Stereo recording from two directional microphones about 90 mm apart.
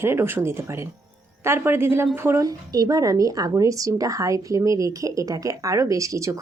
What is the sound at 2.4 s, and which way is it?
Speech, 45° right (ahead or behind).